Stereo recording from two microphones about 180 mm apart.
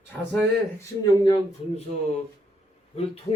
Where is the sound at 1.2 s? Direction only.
25° left (ahead or behind).